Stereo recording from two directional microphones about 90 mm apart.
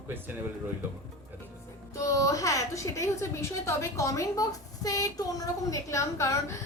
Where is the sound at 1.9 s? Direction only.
35° left (ahead or behind).